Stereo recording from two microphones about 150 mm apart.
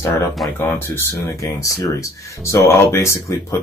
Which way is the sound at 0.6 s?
15° left (ahead or behind).